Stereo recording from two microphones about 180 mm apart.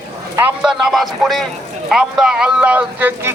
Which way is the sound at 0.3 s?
5° right (ahead or behind).